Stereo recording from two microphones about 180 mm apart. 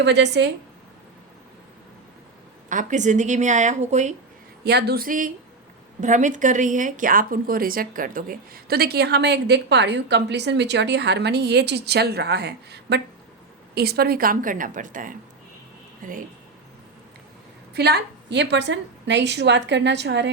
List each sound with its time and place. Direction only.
0.0 s a woman's voice: 70° right (ahead or behind)
2.6 s a woman's voice: 45° right (ahead or behind)
4.6 s a woman's voice: 65° right (ahead or behind); by 16.2 s 50° right (ahead or behind)
17.7 s a woman's voice: 65° right (ahead or behind)